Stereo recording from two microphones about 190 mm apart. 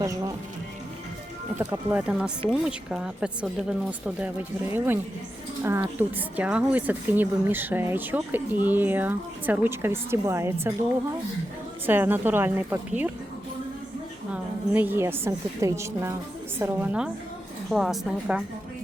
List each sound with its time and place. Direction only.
0.0 s speech: 20° right (ahead or behind)
1.5 s a woman's voice: 10° right (ahead or behind)
11.9 s a woman's voice: 10° right (ahead or behind)
14.3 s a woman's voice: 10° right (ahead or behind)